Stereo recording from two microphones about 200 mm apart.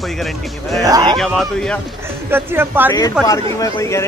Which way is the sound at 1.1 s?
Centre (ahead or behind).